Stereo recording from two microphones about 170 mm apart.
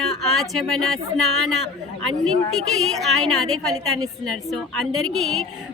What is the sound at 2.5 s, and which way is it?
A woman's voice, centre (ahead or behind).